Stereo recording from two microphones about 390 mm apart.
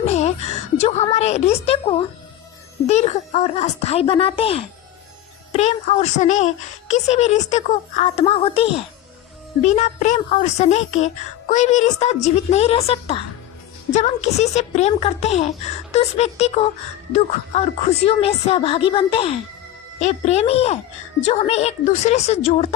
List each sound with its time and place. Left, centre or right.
0.0 s a woman's voice: centre